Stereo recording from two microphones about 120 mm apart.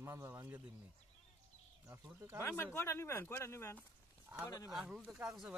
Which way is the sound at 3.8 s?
15° right (ahead or behind).